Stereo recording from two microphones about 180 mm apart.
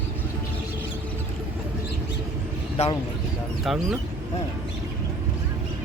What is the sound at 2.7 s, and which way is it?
Speech, 35° left (ahead or behind).